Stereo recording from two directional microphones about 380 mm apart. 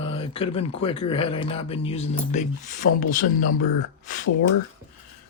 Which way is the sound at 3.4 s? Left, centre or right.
Left.